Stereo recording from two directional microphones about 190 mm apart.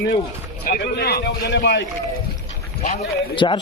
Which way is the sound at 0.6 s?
55° left (ahead or behind).